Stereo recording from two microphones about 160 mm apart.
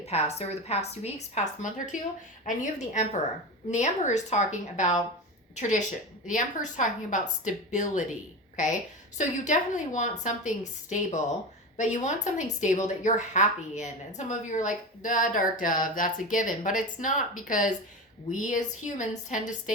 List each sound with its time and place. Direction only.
0.0 s a woman's voice: 40° left (ahead or behind)